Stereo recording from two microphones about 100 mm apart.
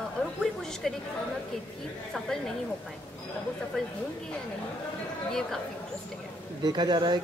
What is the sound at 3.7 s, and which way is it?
Speech, 5° left (ahead or behind).